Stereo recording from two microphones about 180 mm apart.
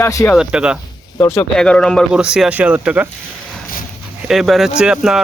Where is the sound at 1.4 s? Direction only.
5° left (ahead or behind).